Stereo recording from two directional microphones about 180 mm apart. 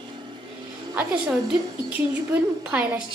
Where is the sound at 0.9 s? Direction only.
5° right (ahead or behind).